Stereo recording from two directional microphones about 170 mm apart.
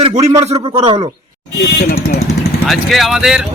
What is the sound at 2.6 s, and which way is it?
Speech, centre (ahead or behind).